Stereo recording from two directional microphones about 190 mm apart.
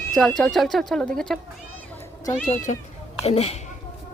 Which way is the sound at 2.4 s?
40° left (ahead or behind).